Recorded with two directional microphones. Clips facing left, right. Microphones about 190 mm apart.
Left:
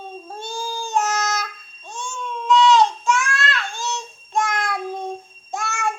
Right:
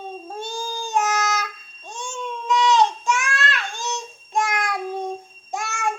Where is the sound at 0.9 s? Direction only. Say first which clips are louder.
Even; 15° right (ahead or behind).